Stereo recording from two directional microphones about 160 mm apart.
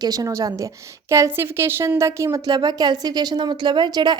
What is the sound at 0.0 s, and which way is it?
A woman's voice, 25° right (ahead or behind).